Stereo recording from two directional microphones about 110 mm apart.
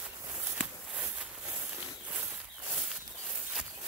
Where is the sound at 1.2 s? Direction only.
15° right (ahead or behind).